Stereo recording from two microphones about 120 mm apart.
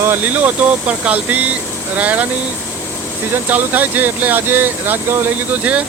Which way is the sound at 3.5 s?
15° right (ahead or behind).